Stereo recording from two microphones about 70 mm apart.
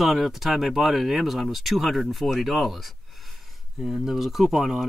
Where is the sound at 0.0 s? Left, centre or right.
Centre.